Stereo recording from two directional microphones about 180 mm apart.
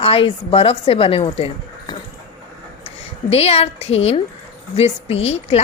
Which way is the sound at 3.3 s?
35° left (ahead or behind).